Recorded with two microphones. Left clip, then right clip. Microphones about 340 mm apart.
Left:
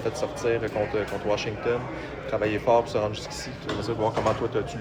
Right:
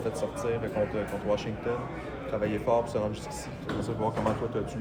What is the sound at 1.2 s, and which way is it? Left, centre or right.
Speech, left.